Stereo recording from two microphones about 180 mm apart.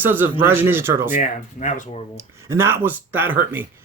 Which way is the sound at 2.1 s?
15° right (ahead or behind).